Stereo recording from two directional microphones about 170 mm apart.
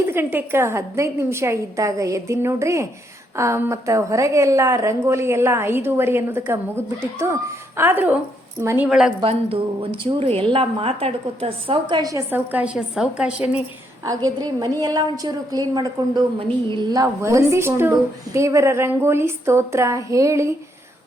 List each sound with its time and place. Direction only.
0.0 s a woman's voice: 15° right (ahead or behind)
9.2 s a woman's voice: 35° right (ahead or behind); by 13.6 s 5° right (ahead or behind)
14.0 s a woman's voice: 20° right (ahead or behind)